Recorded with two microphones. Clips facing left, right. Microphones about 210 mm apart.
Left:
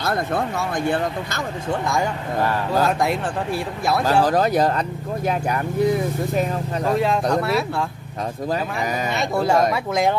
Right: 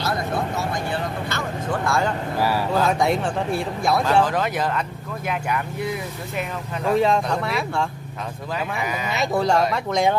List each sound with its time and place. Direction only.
0.8 s speech: 50° left (ahead or behind)
2.8 s speech: centre (ahead or behind)
4.0 s speech: 35° left (ahead or behind)
7.0 s speech: centre (ahead or behind)
9.1 s speech: centre (ahead or behind)